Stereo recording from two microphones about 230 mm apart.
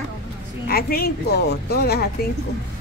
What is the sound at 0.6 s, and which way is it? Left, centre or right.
A woman's voice, left.